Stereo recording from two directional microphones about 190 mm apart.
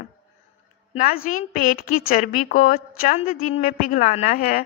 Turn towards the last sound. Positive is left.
turn(degrees=45)  # may be behind; listen again after turning